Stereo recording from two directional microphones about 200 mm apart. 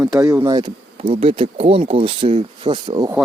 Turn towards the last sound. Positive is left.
turn(degrees=-20)  # may be behind; listen again after turning